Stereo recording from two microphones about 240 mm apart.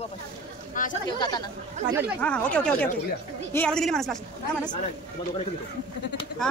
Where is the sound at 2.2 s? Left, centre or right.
Centre.